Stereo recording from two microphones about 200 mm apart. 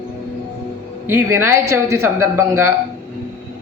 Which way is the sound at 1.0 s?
10° right (ahead or behind).